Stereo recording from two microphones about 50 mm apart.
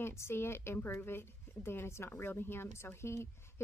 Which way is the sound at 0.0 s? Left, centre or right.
Left.